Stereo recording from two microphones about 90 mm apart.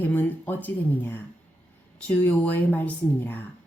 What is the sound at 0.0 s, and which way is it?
Speech, 20° left (ahead or behind).